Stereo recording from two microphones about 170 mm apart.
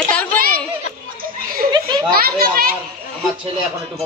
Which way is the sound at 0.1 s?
10° left (ahead or behind).